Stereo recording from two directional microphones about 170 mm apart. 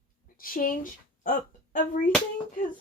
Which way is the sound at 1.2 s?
55° left (ahead or behind).